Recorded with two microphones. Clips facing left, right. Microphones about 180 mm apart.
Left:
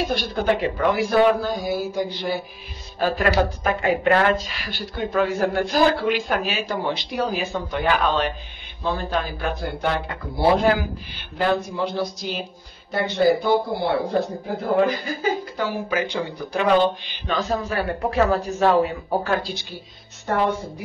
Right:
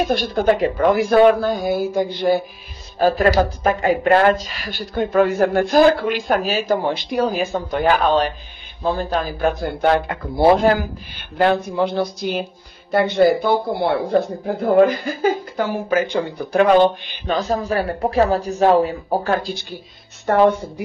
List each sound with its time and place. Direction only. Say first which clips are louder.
0.0 s speech: right 5 dB; 50° right (ahead or behind)
3.0 s a woman's voice: right 5 dB; 40° right (ahead or behind)